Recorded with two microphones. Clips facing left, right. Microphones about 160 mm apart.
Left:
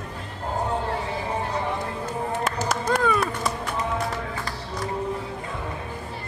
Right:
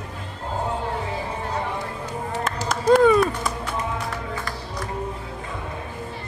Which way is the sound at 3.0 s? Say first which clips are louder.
Right 6 dB; 25° right (ahead or behind).